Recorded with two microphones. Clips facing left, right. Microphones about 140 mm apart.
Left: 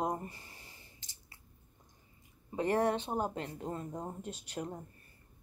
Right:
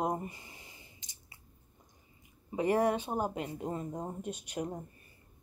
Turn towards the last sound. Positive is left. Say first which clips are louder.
# right 3 dB
turn(degrees=-15)  # may be behind; listen again after turning